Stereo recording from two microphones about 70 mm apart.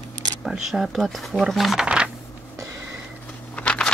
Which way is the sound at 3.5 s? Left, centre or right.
Centre.